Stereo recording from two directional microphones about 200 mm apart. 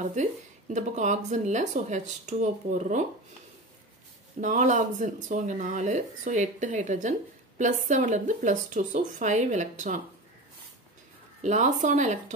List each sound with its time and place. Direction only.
0.0 s speech: 35° right (ahead or behind)
4.4 s speech: 40° right (ahead or behind)
11.4 s speech: 35° right (ahead or behind)